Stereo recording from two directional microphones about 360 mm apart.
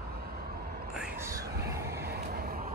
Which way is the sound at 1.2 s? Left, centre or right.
Centre.